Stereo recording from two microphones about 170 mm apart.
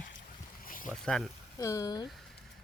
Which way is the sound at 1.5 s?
20° left (ahead or behind).